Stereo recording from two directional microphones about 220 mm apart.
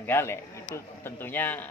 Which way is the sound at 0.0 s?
10° left (ahead or behind).